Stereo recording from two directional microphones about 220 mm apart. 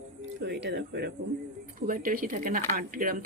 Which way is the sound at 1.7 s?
40° right (ahead or behind).